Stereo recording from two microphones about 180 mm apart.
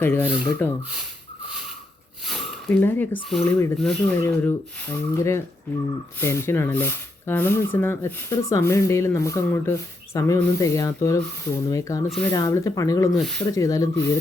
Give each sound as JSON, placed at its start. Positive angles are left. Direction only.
{"t": 0.0, "sound": "speech", "side_deg": 10}
{"t": 2.2, "sound": "sniff", "side_deg": 0}
{"t": 2.8, "sound": "speech", "side_deg": 10}
{"t": 4.2, "sound": "speech", "side_deg": 15}
{"t": 12.0, "sound": "speech", "side_deg": 0}
{"t": 12.3, "sound": "speech", "side_deg": 20}
{"t": 13.1, "sound": "speech", "side_deg": 0}
{"t": 13.5, "sound": "speech", "side_deg": 20}